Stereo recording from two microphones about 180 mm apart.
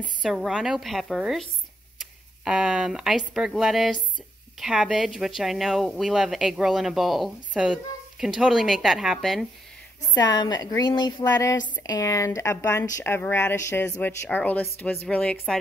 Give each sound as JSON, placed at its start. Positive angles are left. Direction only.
{"t": 0.0, "sound": "speech", "side_deg": 0}
{"t": 10.1, "sound": "speech", "side_deg": 20}